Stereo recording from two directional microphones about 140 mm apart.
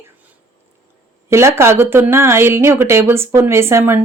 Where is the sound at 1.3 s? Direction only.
20° right (ahead or behind).